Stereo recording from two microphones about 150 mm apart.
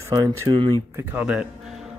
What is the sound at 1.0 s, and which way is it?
Speech, 10° right (ahead or behind).